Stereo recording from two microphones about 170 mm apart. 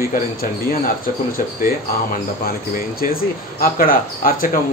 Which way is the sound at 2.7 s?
60° left (ahead or behind).